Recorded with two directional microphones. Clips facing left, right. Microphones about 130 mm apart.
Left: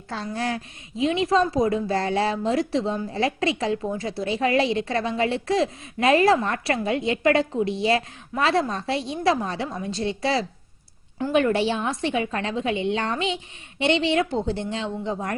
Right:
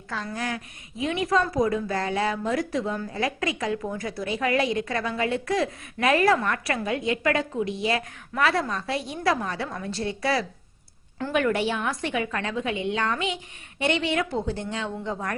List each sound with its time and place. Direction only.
0.3 s speech: 30° left (ahead or behind)